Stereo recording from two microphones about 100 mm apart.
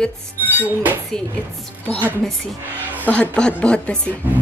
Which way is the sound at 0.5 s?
20° right (ahead or behind).